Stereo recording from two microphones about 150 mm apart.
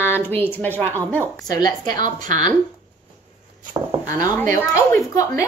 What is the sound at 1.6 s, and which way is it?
Speech, 25° left (ahead or behind).